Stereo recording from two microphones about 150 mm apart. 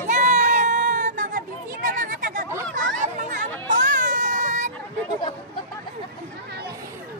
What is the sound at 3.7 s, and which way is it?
Baby cry, 60° right (ahead or behind).